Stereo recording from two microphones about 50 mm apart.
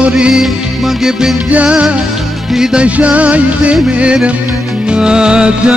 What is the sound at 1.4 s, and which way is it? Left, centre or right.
Music, right.